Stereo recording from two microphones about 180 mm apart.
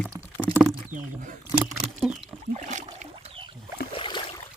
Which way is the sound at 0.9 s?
45° right (ahead or behind).